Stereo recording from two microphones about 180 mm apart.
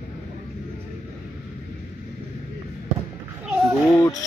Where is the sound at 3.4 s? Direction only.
5° right (ahead or behind).